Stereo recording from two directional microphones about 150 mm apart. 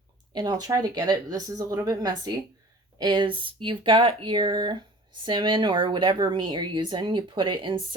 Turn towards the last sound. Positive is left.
turn(degrees=-35)  # may be behind; listen again after turning